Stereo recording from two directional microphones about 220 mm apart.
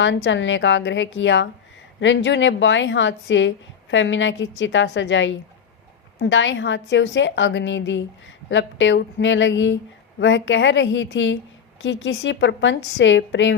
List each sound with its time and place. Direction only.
0.0 s a woman's voice: 55° left (ahead or behind)